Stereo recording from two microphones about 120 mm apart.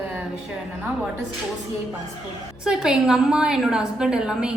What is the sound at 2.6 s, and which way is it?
A woman's voice, 5° right (ahead or behind).